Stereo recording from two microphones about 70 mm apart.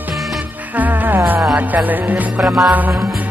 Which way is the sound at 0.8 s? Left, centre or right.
Right.